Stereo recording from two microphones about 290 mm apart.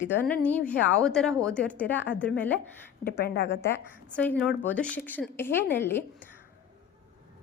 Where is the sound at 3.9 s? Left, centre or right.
Centre.